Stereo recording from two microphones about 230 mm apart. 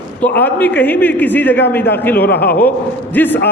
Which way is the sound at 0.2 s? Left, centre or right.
Centre.